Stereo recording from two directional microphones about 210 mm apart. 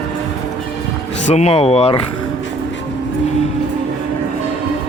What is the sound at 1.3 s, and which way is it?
Speech, 30° left (ahead or behind).